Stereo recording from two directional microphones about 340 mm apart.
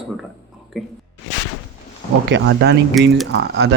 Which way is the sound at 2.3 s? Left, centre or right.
Right.